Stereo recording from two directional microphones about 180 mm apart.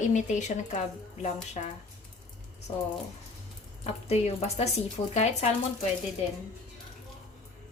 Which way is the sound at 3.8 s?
35° left (ahead or behind).